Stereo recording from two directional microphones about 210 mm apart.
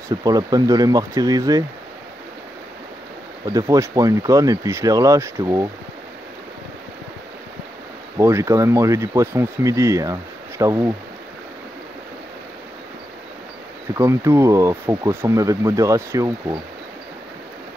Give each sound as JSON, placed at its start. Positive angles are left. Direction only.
{"t": 0.2, "sound": "speech", "side_deg": -20}
{"t": 3.4, "sound": "speech", "side_deg": -15}
{"t": 8.2, "sound": "speech", "side_deg": -10}
{"t": 13.9, "sound": "speech", "side_deg": -15}